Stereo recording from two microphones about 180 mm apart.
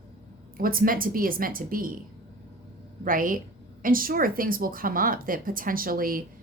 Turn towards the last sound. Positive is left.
turn(degrees=-55)  # may be behind; listen again after turning